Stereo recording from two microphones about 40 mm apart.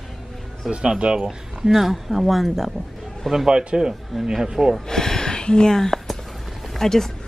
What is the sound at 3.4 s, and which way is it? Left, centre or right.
Speech, centre.